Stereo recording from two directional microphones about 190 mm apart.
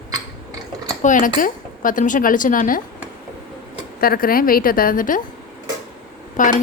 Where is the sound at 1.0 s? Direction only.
45° left (ahead or behind).